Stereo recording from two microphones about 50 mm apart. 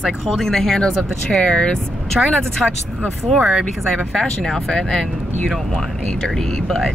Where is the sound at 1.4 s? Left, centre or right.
Left.